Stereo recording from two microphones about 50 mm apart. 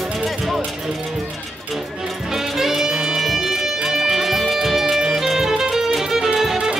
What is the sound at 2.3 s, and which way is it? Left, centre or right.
Music, centre.